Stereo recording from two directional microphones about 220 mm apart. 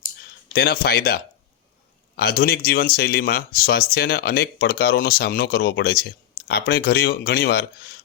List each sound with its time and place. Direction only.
0.5 s speech: 45° left (ahead or behind)